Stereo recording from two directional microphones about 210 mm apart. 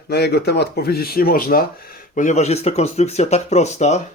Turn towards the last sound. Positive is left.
turn(degrees=30)  # may be behind; listen again after turning